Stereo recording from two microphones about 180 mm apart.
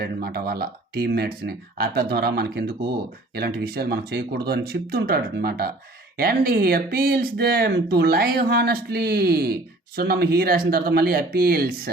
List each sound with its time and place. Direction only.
0.0 s speech: 60° right (ahead or behind)